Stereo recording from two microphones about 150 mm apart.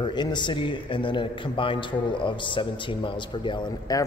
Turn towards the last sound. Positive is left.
turn(degrees=30)  # may be behind; listen again after turning